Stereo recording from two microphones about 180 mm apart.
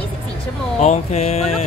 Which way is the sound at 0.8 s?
35° left (ahead or behind).